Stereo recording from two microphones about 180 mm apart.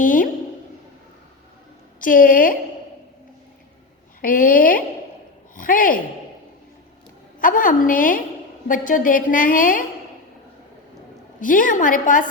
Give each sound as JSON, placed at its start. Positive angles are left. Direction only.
{"t": 0.0, "sound": "a sound", "side_deg": 50}
{"t": 2.0, "sound": "a woman's voice", "side_deg": 50}
{"t": 4.2, "sound": "a woman's voice", "side_deg": 50}
{"t": 7.4, "sound": "a woman's voice", "side_deg": 50}
{"t": 11.3, "sound": "a woman's voice", "side_deg": 50}